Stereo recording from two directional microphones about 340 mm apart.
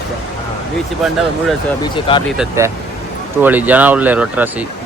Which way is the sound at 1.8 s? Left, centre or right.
Centre.